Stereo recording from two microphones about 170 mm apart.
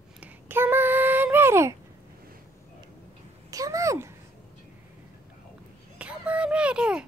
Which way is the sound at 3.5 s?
20° right (ahead or behind).